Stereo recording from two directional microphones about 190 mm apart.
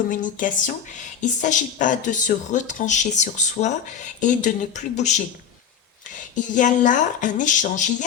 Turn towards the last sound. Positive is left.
turn(degrees=40)  # may be behind; listen again after turning